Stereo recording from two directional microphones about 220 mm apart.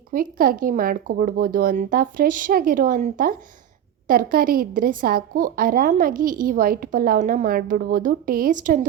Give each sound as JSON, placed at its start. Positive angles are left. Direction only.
{"t": 0.1, "sound": "a woman's voice", "side_deg": -40}